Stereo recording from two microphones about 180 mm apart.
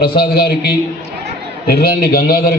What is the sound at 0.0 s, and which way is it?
A man's voice, 60° left (ahead or behind).